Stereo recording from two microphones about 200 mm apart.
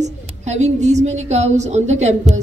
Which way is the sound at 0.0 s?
35° right (ahead or behind).